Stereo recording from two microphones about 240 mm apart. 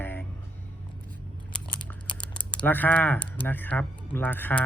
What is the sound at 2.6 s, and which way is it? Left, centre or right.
Speech, centre.